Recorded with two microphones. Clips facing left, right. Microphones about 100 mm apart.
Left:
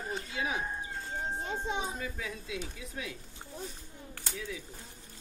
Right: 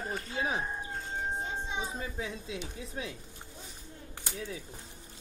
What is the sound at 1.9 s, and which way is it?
A woman's voice, 25° right (ahead or behind).